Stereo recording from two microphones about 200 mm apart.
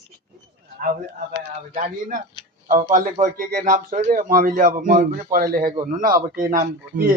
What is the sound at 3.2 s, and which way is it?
Speech, 45° right (ahead or behind).